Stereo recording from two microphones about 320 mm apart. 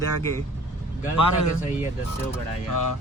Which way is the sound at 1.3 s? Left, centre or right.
Left.